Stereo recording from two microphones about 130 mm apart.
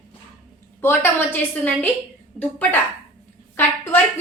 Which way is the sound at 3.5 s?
15° left (ahead or behind).